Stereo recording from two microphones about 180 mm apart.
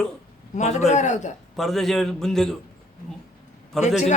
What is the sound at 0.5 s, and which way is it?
Speech, 40° left (ahead or behind).